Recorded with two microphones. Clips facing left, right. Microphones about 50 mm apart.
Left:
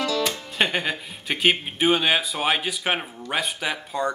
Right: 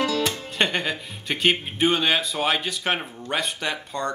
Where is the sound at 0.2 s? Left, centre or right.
Centre.